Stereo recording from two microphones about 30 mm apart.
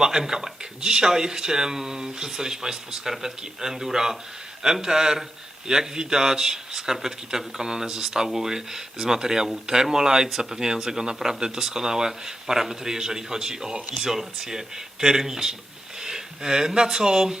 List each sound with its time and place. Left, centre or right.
0.0 s a man's voice: centre